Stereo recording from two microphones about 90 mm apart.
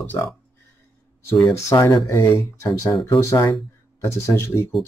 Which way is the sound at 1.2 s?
35° left (ahead or behind).